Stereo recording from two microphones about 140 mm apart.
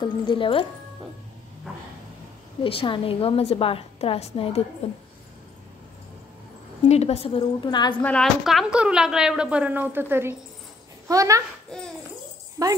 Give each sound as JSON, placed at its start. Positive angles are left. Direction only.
{"t": 0.0, "sound": "a woman's voice", "side_deg": 35}
{"t": 2.6, "sound": "a woman's voice", "side_deg": 40}
{"t": 6.9, "sound": "a woman's voice", "side_deg": 50}
{"t": 8.0, "sound": "a woman's voice", "side_deg": 10}
{"t": 8.5, "sound": "a woman's voice", "side_deg": -5}
{"t": 12.6, "sound": "speech", "side_deg": -25}